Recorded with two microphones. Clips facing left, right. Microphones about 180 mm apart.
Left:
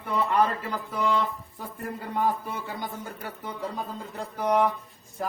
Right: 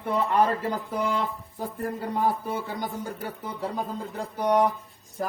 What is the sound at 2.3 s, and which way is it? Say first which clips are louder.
Speech: right 2 dB; 40° right (ahead or behind).